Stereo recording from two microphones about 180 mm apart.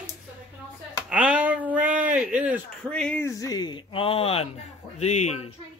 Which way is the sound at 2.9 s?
10° left (ahead or behind).